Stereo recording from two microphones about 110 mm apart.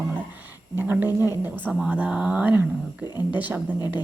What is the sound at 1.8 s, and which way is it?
A woman's voice, 10° right (ahead or behind).